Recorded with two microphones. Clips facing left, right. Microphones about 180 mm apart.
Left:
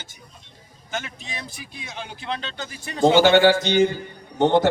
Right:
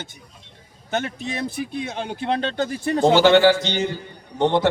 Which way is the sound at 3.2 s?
50° left (ahead or behind).